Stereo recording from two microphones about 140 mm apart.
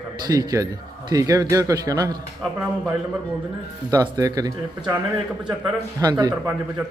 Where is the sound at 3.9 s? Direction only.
25° right (ahead or behind).